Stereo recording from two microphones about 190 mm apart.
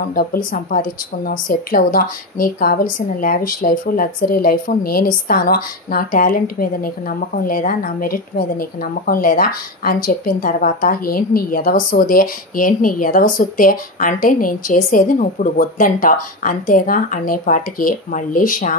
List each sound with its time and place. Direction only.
0.1 s a woman's voice: 50° left (ahead or behind)